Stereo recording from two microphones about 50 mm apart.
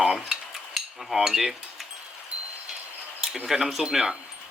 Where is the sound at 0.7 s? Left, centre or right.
Centre.